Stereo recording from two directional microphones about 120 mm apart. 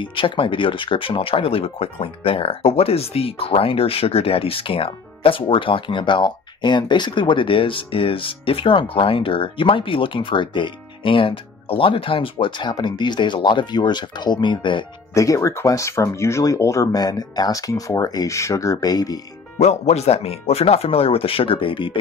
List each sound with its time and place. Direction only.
0.0 s speech: 45° left (ahead or behind)
15.1 s speech: 25° left (ahead or behind)
19.6 s speech: 65° left (ahead or behind); by 21.9 s 45° left (ahead or behind)